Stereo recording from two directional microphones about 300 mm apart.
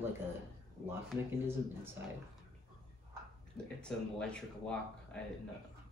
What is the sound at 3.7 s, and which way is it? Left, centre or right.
Speech, centre.